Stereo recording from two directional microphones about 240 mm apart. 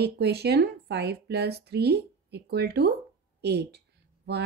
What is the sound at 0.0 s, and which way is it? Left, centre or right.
A woman's voice, right.